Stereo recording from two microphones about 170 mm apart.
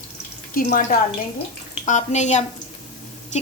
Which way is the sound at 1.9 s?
45° left (ahead or behind).